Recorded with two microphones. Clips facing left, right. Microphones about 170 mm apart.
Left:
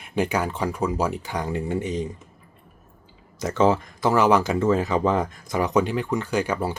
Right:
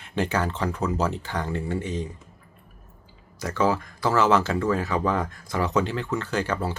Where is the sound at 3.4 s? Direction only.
20° left (ahead or behind).